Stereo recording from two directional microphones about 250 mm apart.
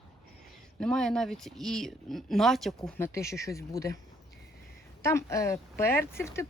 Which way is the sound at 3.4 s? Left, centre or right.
Centre.